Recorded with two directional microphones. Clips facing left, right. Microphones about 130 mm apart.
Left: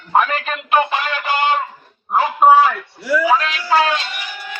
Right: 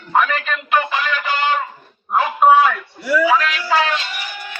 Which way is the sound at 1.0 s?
40° left (ahead or behind).